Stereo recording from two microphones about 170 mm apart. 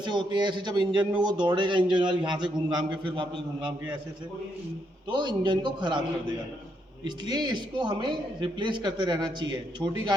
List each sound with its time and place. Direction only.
0.0 s a man's voice: 25° right (ahead or behind)
5.1 s a man's voice: 25° right (ahead or behind)